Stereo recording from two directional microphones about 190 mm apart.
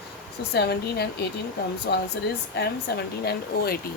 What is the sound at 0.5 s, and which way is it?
Speech, 60° left (ahead or behind).